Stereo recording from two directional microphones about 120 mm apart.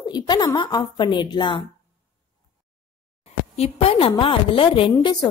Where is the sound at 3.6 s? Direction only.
55° left (ahead or behind).